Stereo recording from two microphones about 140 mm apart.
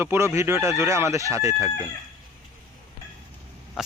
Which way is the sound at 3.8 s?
5° right (ahead or behind).